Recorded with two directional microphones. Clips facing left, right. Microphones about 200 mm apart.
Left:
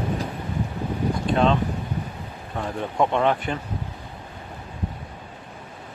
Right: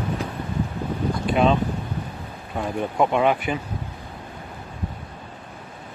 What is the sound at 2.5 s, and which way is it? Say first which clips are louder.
Speech: right 2 dB; 10° right (ahead or behind).